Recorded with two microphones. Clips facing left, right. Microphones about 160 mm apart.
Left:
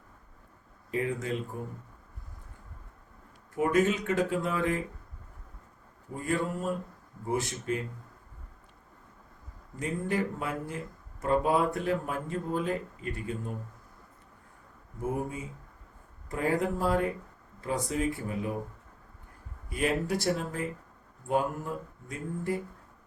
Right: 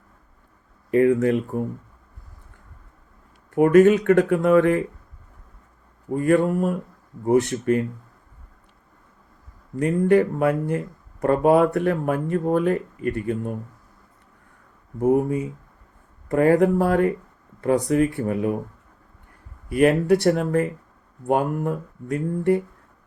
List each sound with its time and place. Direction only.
0.9 s speech: 60° right (ahead or behind)
3.5 s speech: 60° right (ahead or behind)
6.1 s speech: 65° right (ahead or behind)
9.7 s speech: 65° right (ahead or behind)
15.0 s speech: 60° right (ahead or behind)
19.7 s speech: 65° right (ahead or behind)